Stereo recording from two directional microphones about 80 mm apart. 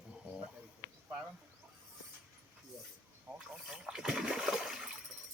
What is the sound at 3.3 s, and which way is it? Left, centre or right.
Splash, centre.